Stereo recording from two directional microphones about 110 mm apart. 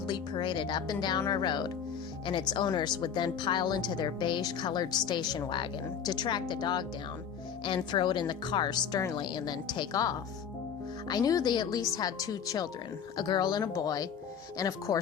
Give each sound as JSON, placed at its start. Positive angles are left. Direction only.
{"t": 0.1, "sound": "speech", "side_deg": 45}
{"t": 7.9, "sound": "speech", "side_deg": 45}